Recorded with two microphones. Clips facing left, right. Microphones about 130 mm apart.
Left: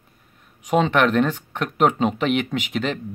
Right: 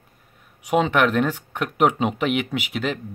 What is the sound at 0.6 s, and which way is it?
Speech, 10° right (ahead or behind).